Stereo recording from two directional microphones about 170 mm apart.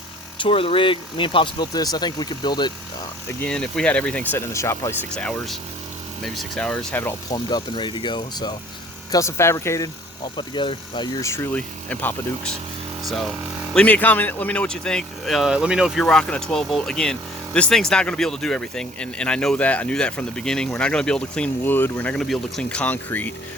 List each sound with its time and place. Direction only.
0.3 s speech: 30° left (ahead or behind)
3.4 s speech: 5° left (ahead or behind)
5.1 s speech: 5° left (ahead or behind)
7.3 s speech: 25° left (ahead or behind)
10.3 s speech: 30° left (ahead or behind); by 23.3 s 10° left (ahead or behind)